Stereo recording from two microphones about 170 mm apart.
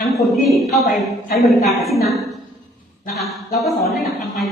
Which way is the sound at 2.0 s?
Centre (ahead or behind).